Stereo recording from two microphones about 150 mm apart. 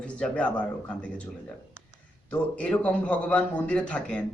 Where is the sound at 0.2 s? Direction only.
10° left (ahead or behind).